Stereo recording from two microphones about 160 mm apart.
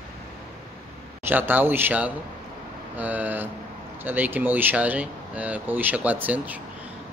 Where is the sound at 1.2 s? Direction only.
10° right (ahead or behind).